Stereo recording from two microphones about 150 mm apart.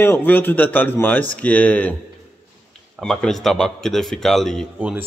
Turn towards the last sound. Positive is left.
turn(degrees=-10)  # may be behind; listen again after turning